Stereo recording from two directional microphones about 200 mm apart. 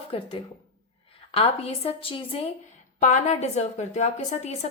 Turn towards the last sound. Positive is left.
turn(degrees=35)  # may be behind; listen again after turning